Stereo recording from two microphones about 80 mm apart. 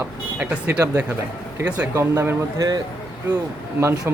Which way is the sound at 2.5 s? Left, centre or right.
Right.